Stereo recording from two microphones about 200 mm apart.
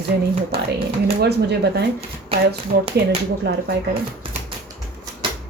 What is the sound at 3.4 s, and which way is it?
Speech, 55° right (ahead or behind).